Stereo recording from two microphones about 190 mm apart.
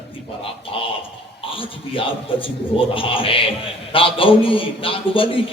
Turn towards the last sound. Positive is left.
turn(degrees=30)  # may be behind; listen again after turning